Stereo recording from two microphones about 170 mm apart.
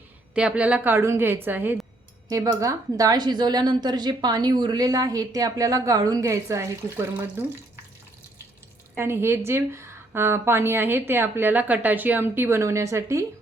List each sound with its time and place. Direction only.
0.3 s a woman's voice: 5° right (ahead or behind)
9.0 s a woman's voice: 15° right (ahead or behind)